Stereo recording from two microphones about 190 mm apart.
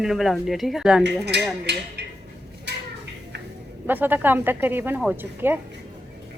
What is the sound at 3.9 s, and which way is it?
A woman's voice, 10° right (ahead or behind).